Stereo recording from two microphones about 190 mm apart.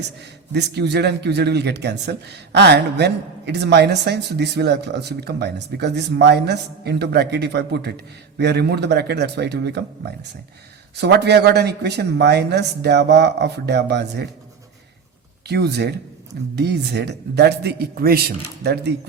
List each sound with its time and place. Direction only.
0.5 s speech: 60° right (ahead or behind)
15.4 s speech: 60° right (ahead or behind)